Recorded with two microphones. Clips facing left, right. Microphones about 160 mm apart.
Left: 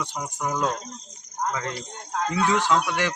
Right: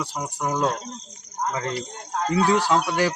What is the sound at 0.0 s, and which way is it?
Speech, 35° right (ahead or behind).